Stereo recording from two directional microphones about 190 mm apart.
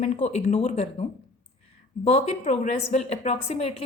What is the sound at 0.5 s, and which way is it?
A woman's voice, 30° left (ahead or behind).